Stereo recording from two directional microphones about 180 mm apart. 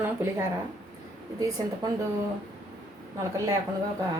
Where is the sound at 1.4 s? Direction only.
20° right (ahead or behind).